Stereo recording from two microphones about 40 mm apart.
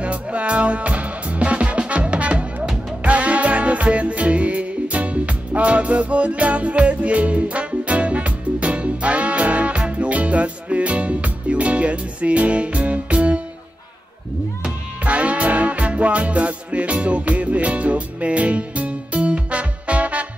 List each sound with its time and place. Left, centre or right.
0.0 s music: right
15.0 s music: right